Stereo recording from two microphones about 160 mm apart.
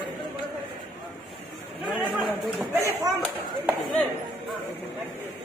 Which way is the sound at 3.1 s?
Centre (ahead or behind).